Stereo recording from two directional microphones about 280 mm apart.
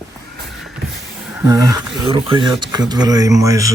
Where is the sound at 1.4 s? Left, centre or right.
Centre.